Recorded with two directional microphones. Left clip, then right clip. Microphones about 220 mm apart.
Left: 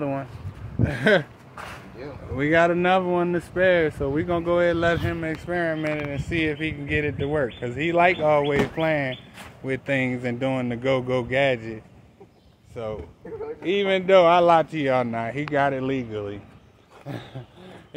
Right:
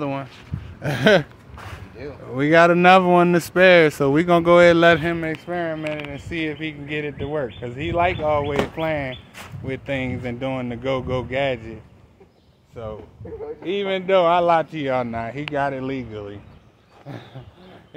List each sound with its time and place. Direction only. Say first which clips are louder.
0.0 s speech: right 1 dB; 15° right (ahead or behind)
0.8 s speech: right 4 dB; 45° right (ahead or behind)
5.5 s speech: left 2 dB; centre (ahead or behind)
5.8 s speech: left 1 dB; 15° left (ahead or behind)